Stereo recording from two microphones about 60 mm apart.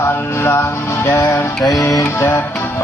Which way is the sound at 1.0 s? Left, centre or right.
Left.